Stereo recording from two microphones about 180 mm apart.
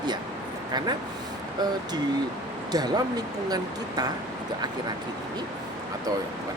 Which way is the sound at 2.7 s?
20° right (ahead or behind).